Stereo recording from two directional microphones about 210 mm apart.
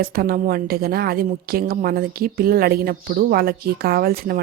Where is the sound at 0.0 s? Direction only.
45° right (ahead or behind).